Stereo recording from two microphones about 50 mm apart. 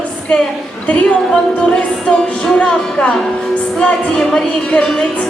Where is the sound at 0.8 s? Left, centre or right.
Left.